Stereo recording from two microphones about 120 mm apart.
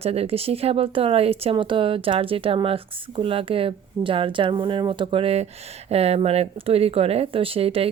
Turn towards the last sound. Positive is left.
turn(degrees=-55)  # may be behind; listen again after turning